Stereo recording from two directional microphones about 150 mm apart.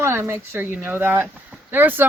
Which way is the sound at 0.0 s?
15° right (ahead or behind).